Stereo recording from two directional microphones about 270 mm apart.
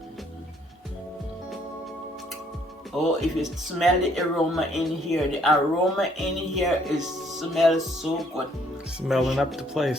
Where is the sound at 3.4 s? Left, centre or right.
Centre.